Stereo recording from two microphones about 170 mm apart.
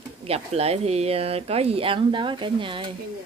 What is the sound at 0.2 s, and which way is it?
Speech, 35° right (ahead or behind).